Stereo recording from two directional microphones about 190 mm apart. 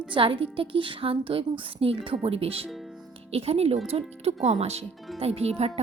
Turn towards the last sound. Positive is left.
turn(degrees=-35)  # may be behind; listen again after turning